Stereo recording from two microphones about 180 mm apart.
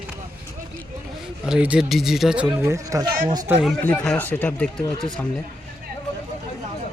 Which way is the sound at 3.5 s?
Centre (ahead or behind).